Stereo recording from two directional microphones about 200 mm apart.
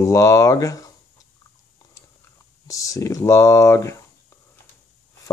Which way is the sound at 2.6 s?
15° left (ahead or behind).